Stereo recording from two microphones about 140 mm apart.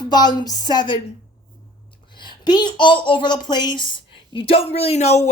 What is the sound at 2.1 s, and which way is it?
A man's voice, 35° left (ahead or behind).